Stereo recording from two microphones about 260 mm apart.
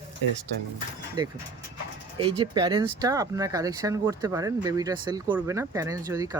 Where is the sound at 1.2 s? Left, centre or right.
Centre.